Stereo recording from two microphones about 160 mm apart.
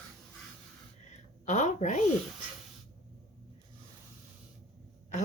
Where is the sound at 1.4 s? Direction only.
50° left (ahead or behind).